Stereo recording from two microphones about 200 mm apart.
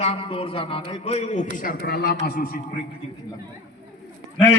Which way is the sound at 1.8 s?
55° left (ahead or behind).